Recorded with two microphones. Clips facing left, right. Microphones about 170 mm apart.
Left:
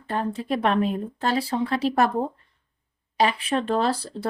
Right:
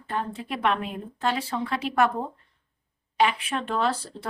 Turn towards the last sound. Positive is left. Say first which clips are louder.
# left 3 dB
turn(degrees=35)  # may be behind; listen again after turning